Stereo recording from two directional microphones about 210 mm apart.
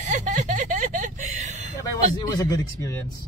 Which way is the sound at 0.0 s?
35° right (ahead or behind).